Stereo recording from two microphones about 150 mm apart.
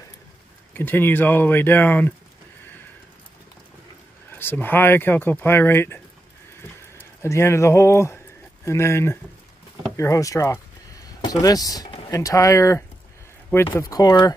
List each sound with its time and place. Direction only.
0.7 s speech: 15° left (ahead or behind)
4.3 s speech: 15° left (ahead or behind)
7.2 s speech: 20° left (ahead or behind)